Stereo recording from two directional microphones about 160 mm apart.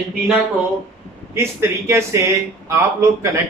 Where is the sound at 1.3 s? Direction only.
15° right (ahead or behind).